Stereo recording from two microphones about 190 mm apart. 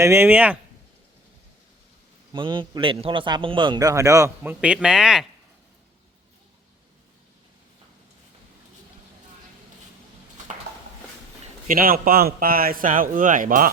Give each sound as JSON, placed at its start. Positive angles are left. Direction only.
{"t": 0.0, "sound": "speech", "side_deg": -10}
{"t": 2.3, "sound": "a man's voice", "side_deg": -25}
{"t": 11.7, "sound": "speech", "side_deg": -50}